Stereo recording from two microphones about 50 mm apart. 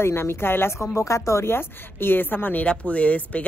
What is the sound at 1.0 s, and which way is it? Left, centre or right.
Speech, left.